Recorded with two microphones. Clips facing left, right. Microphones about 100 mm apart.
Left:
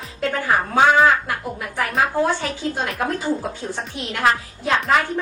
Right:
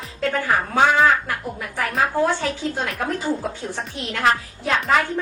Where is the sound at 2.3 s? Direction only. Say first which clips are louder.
Even; 20° left (ahead or behind).